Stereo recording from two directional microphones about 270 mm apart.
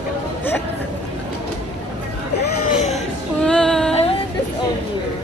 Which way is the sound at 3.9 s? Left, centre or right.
Left.